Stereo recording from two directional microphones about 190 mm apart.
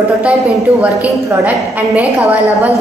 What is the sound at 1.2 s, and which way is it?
A woman's voice, 15° right (ahead or behind).